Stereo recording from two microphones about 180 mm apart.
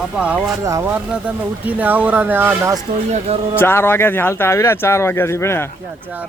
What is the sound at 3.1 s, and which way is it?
Speech, 35° right (ahead or behind).